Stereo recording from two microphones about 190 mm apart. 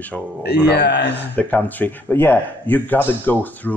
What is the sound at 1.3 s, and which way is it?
Speech, 10° left (ahead or behind).